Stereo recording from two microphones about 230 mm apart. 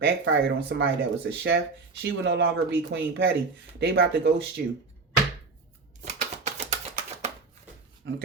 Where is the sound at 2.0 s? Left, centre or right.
Right.